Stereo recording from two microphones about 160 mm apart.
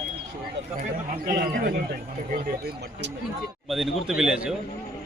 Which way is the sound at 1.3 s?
65° right (ahead or behind).